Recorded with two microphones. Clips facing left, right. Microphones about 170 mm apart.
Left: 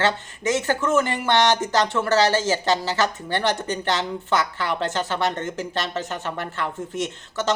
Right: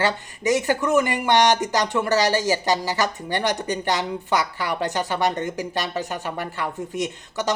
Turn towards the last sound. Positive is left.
turn(degrees=-15)  # may be behind; listen again after turning